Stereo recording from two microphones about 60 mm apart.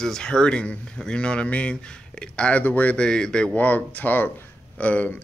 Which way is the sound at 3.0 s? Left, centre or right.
Centre.